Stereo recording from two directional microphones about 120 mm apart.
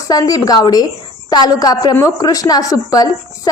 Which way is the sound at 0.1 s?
30° left (ahead or behind).